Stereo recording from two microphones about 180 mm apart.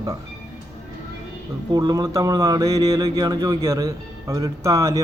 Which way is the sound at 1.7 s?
20° right (ahead or behind).